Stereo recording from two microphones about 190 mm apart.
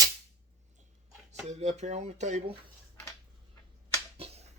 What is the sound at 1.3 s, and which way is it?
Speech, 35° right (ahead or behind).